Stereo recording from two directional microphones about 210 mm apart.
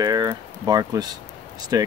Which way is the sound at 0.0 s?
15° right (ahead or behind).